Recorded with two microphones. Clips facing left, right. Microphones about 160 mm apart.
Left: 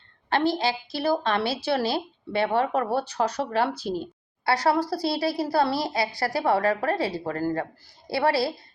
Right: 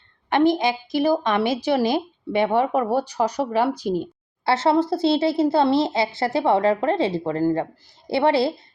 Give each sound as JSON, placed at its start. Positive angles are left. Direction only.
{"t": 0.3, "sound": "a woman's voice", "side_deg": -20}